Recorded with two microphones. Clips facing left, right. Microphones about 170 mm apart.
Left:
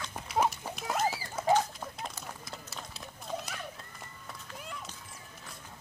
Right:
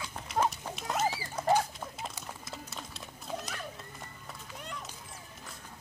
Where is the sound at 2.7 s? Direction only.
Centre (ahead or behind).